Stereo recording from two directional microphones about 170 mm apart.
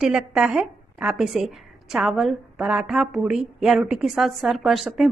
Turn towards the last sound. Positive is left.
turn(degrees=0)  # may be behind; listen again after turning